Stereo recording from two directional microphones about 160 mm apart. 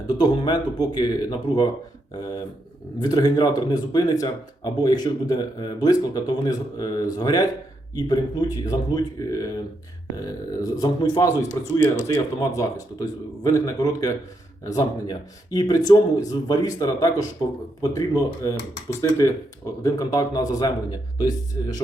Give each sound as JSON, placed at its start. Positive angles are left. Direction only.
{"t": 0.1, "sound": "speech", "side_deg": 25}
{"t": 3.0, "sound": "speech", "side_deg": 25}